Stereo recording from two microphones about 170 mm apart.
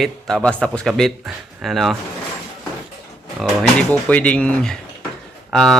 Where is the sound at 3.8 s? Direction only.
10° left (ahead or behind).